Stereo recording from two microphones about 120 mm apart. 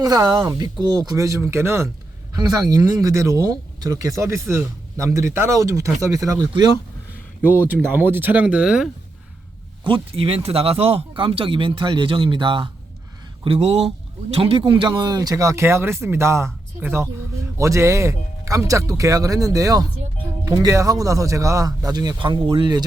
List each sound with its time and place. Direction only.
0.0 s speech: 30° right (ahead or behind)
2.3 s speech: 35° right (ahead or behind)
7.7 s speech: 15° right (ahead or behind)
9.8 s speech: 50° right (ahead or behind)
13.4 s speech: 55° right (ahead or behind); by 22.9 s 40° right (ahead or behind)